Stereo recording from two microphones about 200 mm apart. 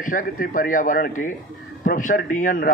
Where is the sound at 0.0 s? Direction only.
40° left (ahead or behind).